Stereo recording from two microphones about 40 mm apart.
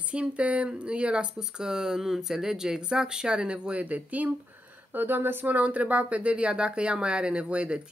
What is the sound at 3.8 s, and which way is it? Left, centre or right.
Speech, right.